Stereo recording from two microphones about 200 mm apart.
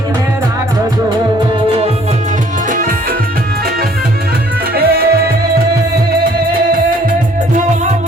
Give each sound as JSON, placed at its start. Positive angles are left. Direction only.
{"t": 2.6, "sound": "music", "side_deg": -45}
{"t": 4.7, "sound": "music", "side_deg": -50}
{"t": 6.7, "sound": "music", "side_deg": -45}